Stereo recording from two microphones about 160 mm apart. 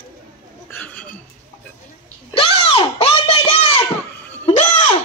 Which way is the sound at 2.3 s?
40° left (ahead or behind).